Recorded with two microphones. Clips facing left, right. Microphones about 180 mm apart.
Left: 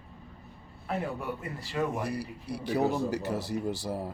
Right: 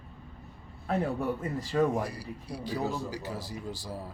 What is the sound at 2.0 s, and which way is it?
Speech, 65° left (ahead or behind).